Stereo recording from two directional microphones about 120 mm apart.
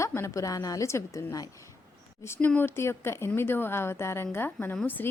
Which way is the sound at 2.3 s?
15° left (ahead or behind).